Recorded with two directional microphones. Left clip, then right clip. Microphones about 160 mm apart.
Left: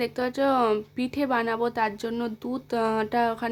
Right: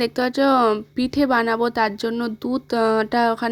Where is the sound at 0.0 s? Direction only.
45° right (ahead or behind).